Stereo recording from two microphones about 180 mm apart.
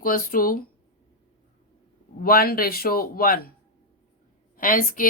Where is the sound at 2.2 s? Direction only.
55° left (ahead or behind).